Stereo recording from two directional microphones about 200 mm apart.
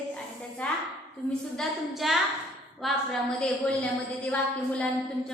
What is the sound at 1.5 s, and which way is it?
A woman's voice, centre (ahead or behind).